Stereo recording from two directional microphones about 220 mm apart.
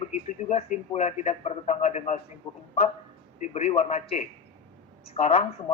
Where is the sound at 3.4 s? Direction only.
30° left (ahead or behind).